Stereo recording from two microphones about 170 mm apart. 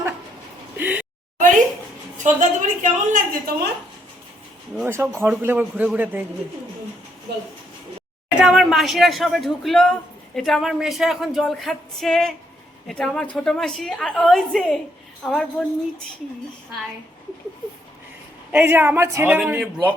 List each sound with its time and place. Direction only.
0.8 s a sound: 10° right (ahead or behind)
2.1 s a woman's voice: 45° right (ahead or behind)
4.9 s a man's voice: 15° right (ahead or behind)
8.4 s speech: 5° right (ahead or behind)
18.5 s a man's voice: 10° right (ahead or behind)
19.4 s speech: 5° right (ahead or behind)